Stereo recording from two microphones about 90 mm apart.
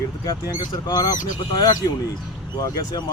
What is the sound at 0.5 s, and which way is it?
Speech, 45° left (ahead or behind).